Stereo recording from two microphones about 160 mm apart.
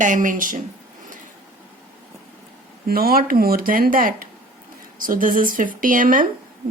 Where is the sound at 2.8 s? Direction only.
70° right (ahead or behind).